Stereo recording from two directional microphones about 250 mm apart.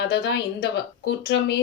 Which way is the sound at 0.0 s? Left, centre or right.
Left.